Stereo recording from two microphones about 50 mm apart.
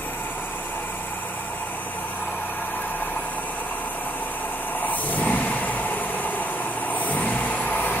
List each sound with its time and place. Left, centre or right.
4.8 s vehicle: left